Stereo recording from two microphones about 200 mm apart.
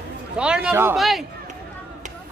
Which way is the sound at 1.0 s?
Centre (ahead or behind).